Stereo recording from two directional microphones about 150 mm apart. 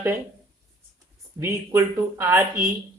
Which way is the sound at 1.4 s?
15° right (ahead or behind).